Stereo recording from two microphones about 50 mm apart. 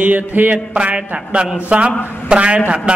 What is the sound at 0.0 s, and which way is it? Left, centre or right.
Speech, right.